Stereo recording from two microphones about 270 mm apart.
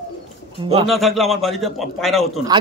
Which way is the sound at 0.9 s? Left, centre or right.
Centre.